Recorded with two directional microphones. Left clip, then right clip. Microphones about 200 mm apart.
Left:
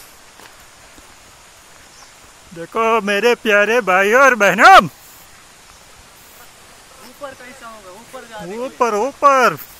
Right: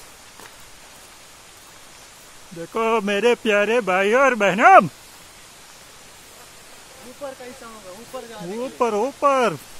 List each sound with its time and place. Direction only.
2.6 s speech: 5° left (ahead or behind)
8.5 s speech: 5° right (ahead or behind)